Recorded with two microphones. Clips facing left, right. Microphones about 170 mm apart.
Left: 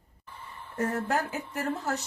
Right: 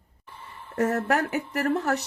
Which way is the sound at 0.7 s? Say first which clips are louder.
Right 5 dB; 80° right.